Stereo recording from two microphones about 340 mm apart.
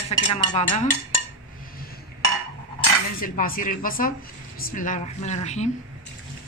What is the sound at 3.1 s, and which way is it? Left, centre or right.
Speech, left.